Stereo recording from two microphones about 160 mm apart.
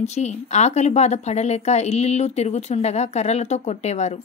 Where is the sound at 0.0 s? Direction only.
45° left (ahead or behind).